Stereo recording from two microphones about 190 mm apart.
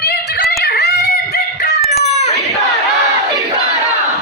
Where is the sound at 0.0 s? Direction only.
60° left (ahead or behind).